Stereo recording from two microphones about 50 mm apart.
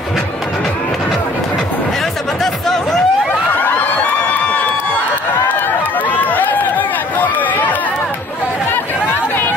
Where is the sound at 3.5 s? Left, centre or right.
Left.